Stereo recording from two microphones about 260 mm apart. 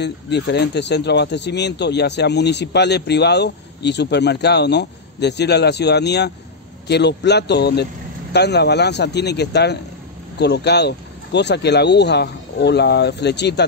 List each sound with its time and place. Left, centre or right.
0.0 s speech: left